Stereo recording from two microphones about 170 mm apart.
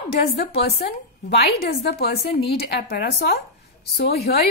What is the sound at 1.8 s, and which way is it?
Speech, 70° left (ahead or behind).